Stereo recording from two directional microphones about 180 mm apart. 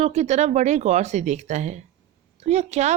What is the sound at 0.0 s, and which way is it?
Speech, 40° right (ahead or behind).